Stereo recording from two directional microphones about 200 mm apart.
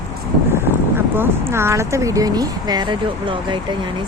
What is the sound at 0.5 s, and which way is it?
Speech, 10° right (ahead or behind).